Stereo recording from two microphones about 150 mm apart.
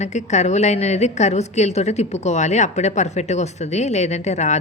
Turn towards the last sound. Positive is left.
turn(degrees=50)  # may be behind; listen again after turning